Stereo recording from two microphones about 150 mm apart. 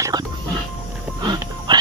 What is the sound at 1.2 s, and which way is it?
Music, 30° right (ahead or behind).